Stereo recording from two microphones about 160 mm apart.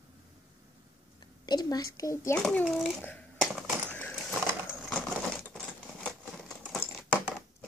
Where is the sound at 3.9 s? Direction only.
10° left (ahead or behind).